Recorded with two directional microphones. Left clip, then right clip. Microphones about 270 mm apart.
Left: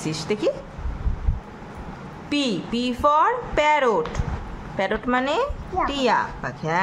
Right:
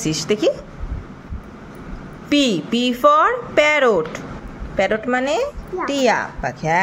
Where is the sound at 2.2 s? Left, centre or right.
Centre.